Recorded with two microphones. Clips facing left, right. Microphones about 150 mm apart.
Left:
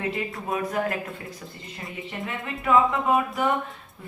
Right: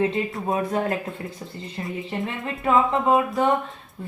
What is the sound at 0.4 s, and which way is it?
Speech, 30° right (ahead or behind).